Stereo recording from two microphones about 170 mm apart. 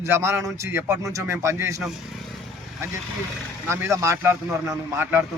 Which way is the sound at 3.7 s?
15° right (ahead or behind).